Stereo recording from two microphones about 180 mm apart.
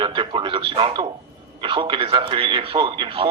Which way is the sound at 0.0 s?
30° right (ahead or behind).